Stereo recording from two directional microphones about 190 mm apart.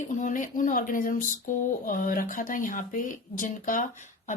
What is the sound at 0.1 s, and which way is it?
Speech, 40° left (ahead or behind).